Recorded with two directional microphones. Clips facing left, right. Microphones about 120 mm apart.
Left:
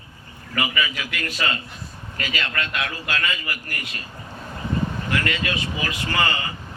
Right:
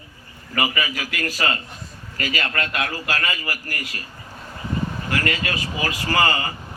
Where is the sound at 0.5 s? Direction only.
30° right (ahead or behind).